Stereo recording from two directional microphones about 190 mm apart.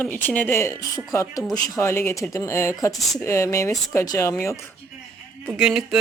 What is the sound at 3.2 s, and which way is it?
Speech, 15° left (ahead or behind).